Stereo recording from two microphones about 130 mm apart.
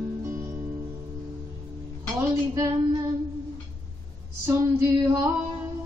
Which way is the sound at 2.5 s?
30° right (ahead or behind).